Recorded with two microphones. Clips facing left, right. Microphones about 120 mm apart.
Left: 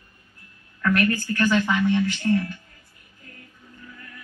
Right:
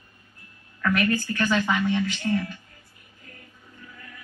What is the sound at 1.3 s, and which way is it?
Speech, 20° right (ahead or behind).